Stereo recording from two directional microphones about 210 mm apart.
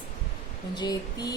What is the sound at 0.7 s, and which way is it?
Speech, 20° left (ahead or behind).